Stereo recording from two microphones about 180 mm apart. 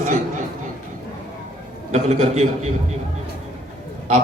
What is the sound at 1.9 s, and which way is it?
Speech, 35° right (ahead or behind).